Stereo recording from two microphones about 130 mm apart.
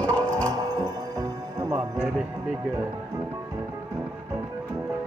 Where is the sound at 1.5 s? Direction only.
25° right (ahead or behind).